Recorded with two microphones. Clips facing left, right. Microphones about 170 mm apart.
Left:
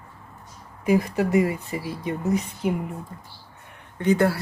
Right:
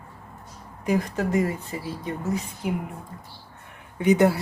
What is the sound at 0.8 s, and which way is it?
Speech, 5° left (ahead or behind).